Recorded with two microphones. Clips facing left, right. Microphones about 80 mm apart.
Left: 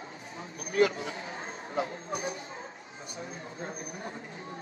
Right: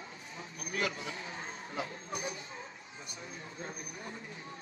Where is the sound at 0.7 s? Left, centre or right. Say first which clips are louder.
Left 10 dB; left.